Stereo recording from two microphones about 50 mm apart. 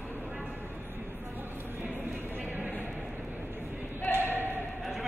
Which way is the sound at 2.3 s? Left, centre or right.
Right.